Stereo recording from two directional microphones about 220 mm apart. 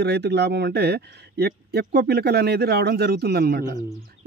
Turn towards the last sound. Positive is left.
turn(degrees=-45)  # may be behind; listen again after turning